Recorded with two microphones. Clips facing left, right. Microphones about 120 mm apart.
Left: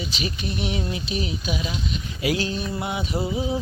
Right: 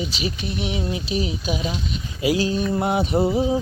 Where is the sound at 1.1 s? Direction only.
30° right (ahead or behind).